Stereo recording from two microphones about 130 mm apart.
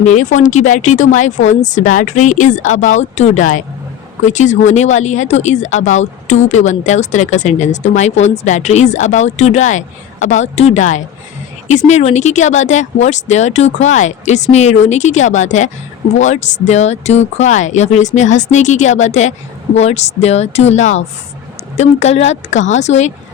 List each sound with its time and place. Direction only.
0.0 s a woman's voice: 70° left (ahead or behind)